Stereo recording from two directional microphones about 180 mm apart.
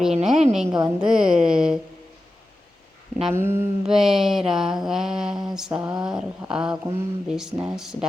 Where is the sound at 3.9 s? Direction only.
Centre (ahead or behind).